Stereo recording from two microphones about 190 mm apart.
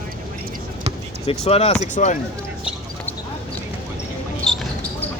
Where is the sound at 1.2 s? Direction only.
35° left (ahead or behind).